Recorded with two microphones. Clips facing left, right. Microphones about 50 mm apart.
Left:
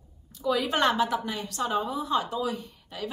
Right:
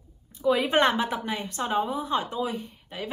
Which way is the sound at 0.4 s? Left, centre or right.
Right.